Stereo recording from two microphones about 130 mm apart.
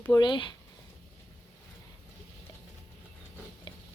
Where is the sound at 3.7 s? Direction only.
35° left (ahead or behind).